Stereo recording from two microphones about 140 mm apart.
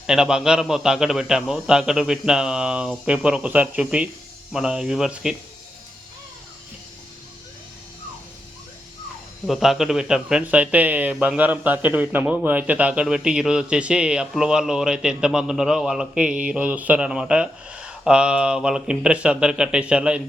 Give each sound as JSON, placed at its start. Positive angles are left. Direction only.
{"t": 0.1, "sound": "a man's voice", "side_deg": -5}
{"t": 9.5, "sound": "speech", "side_deg": 0}